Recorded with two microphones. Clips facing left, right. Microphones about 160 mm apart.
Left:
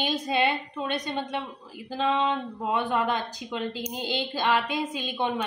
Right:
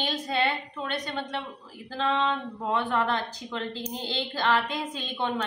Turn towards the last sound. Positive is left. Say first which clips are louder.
# left 2 dB
turn(degrees=10)  # may be behind; listen again after turning